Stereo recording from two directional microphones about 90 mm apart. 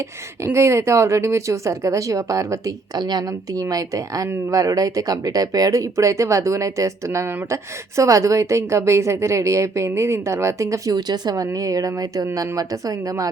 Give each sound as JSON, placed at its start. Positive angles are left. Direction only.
{"t": 0.4, "sound": "speech", "side_deg": -30}
{"t": 10.9, "sound": "speech", "side_deg": -50}
{"t": 11.4, "sound": "speech", "side_deg": -40}